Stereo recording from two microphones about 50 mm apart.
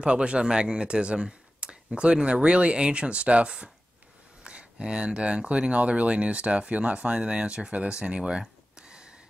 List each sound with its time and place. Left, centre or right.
0.0 s speech: right